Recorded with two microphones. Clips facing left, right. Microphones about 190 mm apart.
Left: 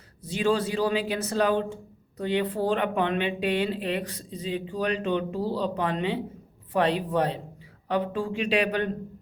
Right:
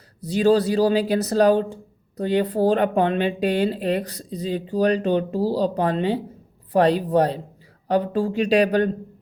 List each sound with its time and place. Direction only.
0.2 s speech: 35° right (ahead or behind)